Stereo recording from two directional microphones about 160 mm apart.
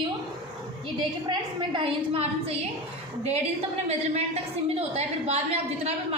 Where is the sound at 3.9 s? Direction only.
40° right (ahead or behind).